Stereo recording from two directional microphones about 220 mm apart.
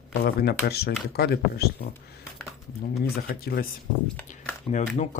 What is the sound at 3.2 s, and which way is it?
Speech, 45° left (ahead or behind).